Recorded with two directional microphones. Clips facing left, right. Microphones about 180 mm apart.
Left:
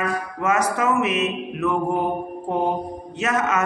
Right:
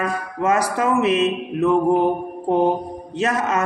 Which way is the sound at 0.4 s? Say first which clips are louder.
Right 2 dB; 30° right (ahead or behind).